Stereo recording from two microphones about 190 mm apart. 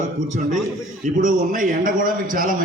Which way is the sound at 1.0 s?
45° right (ahead or behind).